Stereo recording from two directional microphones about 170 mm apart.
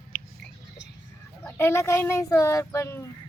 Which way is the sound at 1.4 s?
15° left (ahead or behind).